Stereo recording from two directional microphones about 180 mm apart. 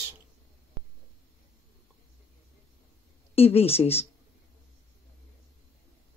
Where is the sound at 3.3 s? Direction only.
35° left (ahead or behind).